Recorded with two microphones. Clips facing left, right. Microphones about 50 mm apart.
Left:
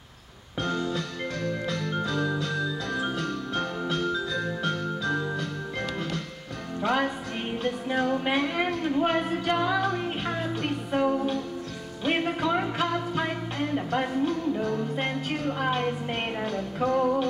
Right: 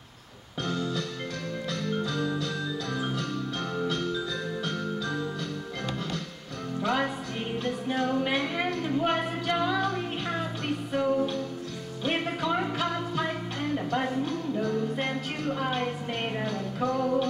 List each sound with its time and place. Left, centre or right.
0.6 s music: left
6.8 s music: left
7.9 s a sound: centre
9.6 s music: left
13.8 s speech: left
14.8 s music: left